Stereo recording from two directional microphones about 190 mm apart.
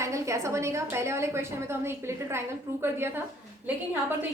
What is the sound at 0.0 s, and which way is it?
A woman's voice, 15° right (ahead or behind).